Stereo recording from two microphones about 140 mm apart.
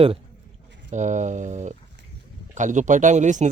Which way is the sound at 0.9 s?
60° right (ahead or behind).